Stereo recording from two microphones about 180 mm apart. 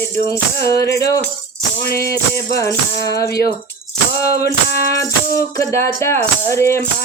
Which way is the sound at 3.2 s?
20° left (ahead or behind).